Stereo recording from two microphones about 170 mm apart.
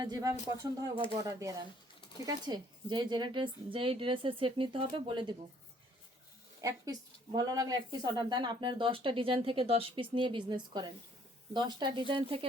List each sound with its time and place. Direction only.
0.0 s speech: 20° right (ahead or behind)
6.6 s speech: 20° right (ahead or behind)